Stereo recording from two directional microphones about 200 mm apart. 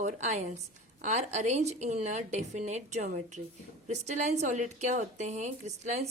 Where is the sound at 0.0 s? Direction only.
35° right (ahead or behind).